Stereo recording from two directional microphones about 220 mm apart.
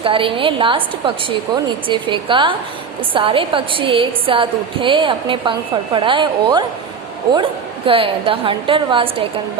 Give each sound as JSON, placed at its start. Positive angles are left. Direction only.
{"t": 0.0, "sound": "a woman's voice", "side_deg": -25}
{"t": 7.9, "sound": "a woman's voice", "side_deg": -25}